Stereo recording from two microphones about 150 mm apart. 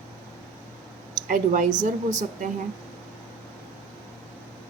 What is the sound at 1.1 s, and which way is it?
Speech, 65° right (ahead or behind).